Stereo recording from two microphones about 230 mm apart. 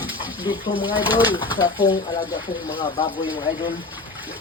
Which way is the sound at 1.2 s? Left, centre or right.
Centre.